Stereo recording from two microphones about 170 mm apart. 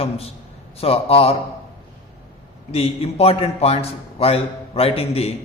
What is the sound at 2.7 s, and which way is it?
A man's voice, 35° left (ahead or behind).